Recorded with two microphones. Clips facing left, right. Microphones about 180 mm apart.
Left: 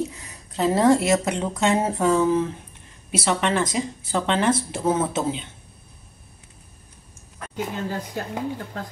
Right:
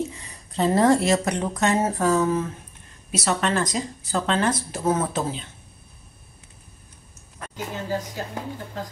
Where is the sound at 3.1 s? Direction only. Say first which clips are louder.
Left 1 dB; 25° left (ahead or behind).